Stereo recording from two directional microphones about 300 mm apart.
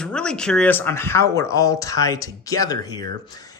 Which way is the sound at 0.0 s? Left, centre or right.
Centre.